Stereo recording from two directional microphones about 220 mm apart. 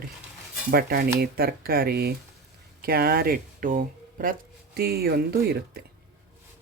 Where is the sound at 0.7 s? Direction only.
45° right (ahead or behind).